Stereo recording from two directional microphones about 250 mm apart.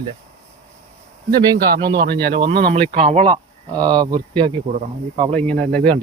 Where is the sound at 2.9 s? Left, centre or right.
Right.